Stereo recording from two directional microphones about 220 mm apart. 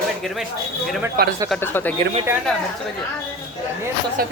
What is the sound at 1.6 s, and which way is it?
Speech, 10° left (ahead or behind).